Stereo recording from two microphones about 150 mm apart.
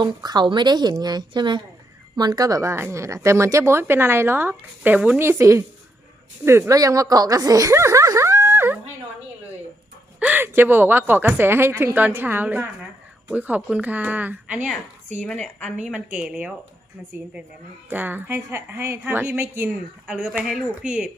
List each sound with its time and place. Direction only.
0.0 s a woman's voice: 30° right (ahead or behind)
6.4 s a sound: 15° right (ahead or behind)
10.2 s a woman's voice: 15° right (ahead or behind)
15.2 s a woman's voice: 10° left (ahead or behind)
16.1 s a woman's voice: 5° right (ahead or behind)
17.8 s a woman's voice: 10° right (ahead or behind)